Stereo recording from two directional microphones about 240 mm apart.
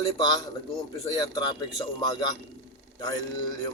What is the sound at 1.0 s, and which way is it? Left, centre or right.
Speech, centre.